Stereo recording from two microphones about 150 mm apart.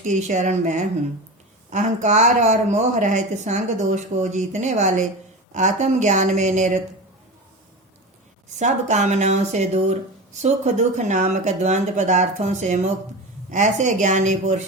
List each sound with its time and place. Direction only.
0.0 s speech: 55° right (ahead or behind)
8.5 s speech: 50° right (ahead or behind)